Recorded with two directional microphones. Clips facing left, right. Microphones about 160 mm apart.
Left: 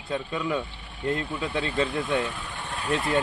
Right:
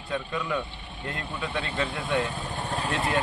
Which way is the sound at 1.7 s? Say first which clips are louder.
Left 1 dB; 25° right (ahead or behind).